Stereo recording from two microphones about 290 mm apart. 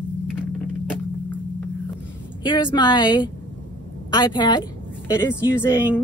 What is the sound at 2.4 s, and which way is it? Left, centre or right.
A woman's voice, centre.